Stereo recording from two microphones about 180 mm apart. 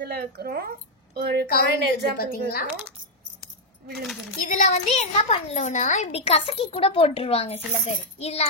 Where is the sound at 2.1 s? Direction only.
55° left (ahead or behind).